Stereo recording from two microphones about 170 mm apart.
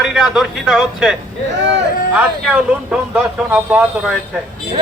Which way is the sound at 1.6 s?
90° right.